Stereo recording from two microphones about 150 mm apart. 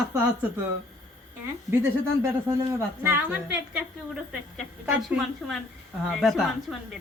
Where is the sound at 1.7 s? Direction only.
20° right (ahead or behind).